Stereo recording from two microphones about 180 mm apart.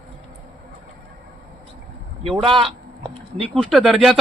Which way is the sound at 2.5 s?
30° right (ahead or behind).